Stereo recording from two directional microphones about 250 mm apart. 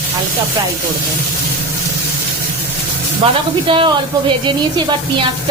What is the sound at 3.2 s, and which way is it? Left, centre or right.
A woman's voice, right.